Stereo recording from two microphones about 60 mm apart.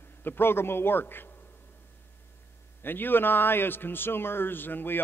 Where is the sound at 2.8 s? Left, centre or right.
Left.